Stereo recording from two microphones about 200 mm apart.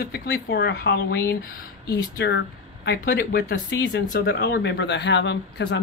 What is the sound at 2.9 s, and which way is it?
Speech, 50° left (ahead or behind).